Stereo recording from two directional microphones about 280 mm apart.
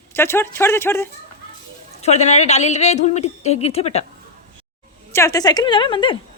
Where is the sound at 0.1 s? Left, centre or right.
Centre.